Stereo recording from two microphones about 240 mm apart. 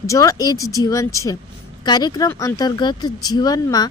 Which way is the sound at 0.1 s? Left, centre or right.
Centre.